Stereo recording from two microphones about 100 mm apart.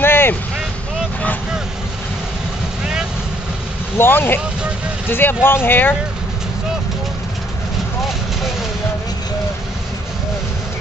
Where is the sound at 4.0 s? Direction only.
20° left (ahead or behind).